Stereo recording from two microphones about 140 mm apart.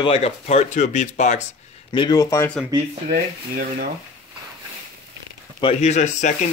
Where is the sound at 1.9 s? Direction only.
30° left (ahead or behind).